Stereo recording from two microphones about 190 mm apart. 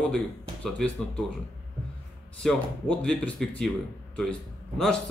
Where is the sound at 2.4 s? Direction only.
5° left (ahead or behind).